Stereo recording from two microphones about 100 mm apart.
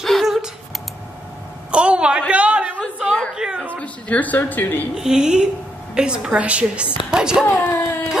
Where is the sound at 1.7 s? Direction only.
10° right (ahead or behind).